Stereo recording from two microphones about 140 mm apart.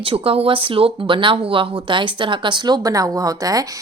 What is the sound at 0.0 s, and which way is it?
A woman's voice, 40° right (ahead or behind).